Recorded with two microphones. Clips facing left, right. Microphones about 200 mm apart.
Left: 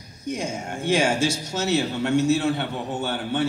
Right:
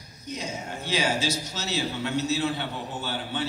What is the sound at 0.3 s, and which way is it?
A man's voice, 50° left (ahead or behind).